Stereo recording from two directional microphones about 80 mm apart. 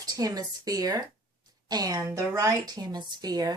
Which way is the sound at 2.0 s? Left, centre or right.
Right.